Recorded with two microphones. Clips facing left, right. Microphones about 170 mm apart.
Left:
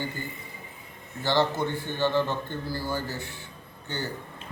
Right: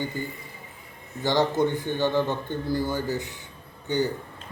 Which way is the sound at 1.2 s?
15° right (ahead or behind).